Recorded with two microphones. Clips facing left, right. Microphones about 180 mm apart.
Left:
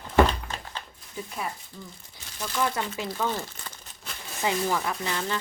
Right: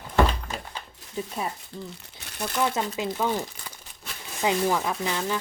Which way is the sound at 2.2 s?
65° right (ahead or behind).